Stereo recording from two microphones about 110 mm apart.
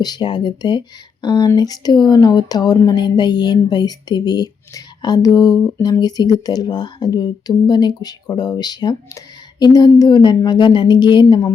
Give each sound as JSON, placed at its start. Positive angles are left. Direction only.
{"t": 0.0, "sound": "speech", "side_deg": 40}